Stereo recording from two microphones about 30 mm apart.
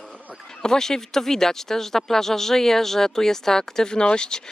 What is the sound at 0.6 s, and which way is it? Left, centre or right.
Speech, centre.